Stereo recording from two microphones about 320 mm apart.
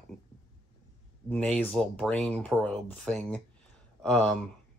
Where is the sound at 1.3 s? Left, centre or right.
Centre.